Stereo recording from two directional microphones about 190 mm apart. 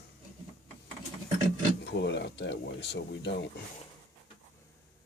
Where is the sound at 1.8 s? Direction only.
65° left (ahead or behind).